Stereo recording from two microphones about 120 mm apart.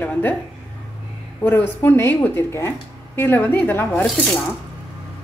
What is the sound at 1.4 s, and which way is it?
Speech, 15° left (ahead or behind).